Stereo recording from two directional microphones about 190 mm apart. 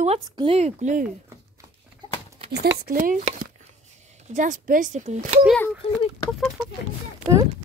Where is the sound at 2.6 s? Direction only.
45° right (ahead or behind).